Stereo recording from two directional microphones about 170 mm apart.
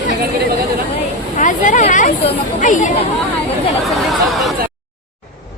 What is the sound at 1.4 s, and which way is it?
Speech, 50° left (ahead or behind).